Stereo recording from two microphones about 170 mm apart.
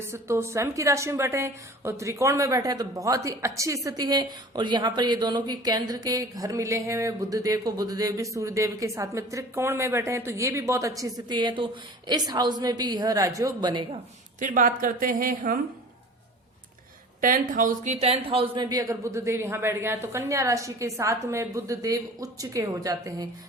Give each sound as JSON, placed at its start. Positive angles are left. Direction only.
{"t": 0.0, "sound": "a woman's voice", "side_deg": -15}
{"t": 14.3, "sound": "speech", "side_deg": -50}
{"t": 17.2, "sound": "speech", "side_deg": -55}